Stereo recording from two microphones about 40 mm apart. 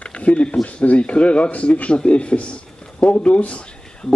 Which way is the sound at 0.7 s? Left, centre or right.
Left.